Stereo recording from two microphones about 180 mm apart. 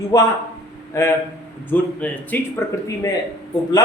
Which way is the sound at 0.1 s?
20° left (ahead or behind).